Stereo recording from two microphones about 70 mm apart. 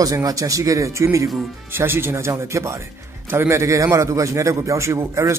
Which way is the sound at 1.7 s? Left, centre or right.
Right.